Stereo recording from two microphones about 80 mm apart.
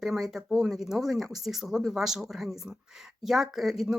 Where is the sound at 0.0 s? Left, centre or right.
Centre.